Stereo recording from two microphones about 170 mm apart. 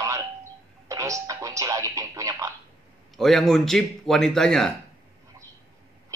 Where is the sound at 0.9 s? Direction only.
20° right (ahead or behind).